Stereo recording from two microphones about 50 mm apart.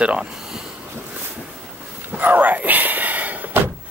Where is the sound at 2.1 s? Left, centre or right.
Right.